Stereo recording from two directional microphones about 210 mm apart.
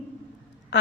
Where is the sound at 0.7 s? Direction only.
55° left (ahead or behind).